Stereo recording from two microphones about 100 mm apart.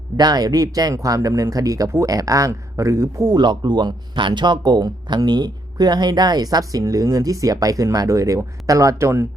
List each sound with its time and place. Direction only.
0.2 s speech: 40° right (ahead or behind)
3.3 s speech: 50° right (ahead or behind); by 9.2 s 30° right (ahead or behind)